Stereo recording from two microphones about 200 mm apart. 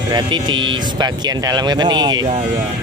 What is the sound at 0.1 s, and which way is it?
Speech, 20° right (ahead or behind).